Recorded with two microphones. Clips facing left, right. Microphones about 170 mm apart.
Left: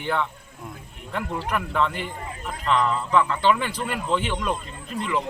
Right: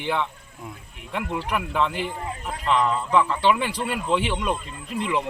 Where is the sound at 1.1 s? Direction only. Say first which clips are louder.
Even; 10° right (ahead or behind).